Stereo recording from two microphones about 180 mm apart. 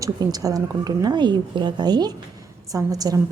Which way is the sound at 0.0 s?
20° right (ahead or behind).